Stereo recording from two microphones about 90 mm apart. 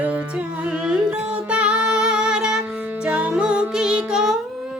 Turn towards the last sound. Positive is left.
turn(degrees=-5)  # may be behind; listen again after turning